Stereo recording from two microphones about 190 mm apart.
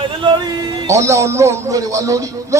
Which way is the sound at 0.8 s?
15° right (ahead or behind).